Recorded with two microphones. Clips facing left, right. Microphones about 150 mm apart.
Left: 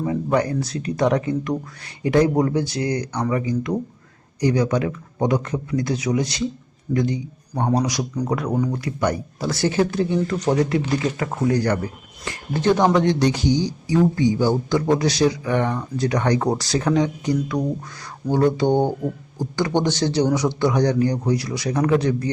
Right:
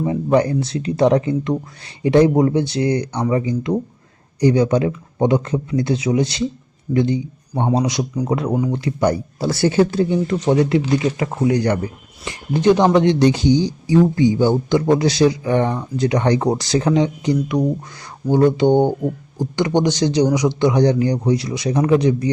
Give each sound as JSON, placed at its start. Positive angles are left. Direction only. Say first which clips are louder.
{"t": 0.0, "sound": "a man's voice", "louder": "right 4 dB", "side_deg": -25}
{"t": 8.4, "sound": "speech", "louder": "right 2 dB", "side_deg": -10}
{"t": 8.7, "sound": "speech", "louder": "right 4 dB", "side_deg": -30}